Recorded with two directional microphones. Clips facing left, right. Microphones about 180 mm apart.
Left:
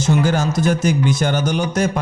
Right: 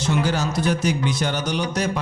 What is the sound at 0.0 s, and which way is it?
Speech, 45° left (ahead or behind).